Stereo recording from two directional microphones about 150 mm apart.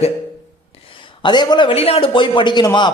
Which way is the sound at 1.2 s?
30° left (ahead or behind).